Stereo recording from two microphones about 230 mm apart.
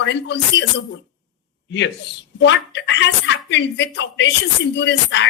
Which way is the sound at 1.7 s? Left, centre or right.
Left.